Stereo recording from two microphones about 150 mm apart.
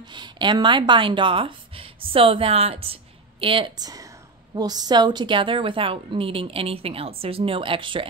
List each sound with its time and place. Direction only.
0.1 s a woman's voice: 30° right (ahead or behind)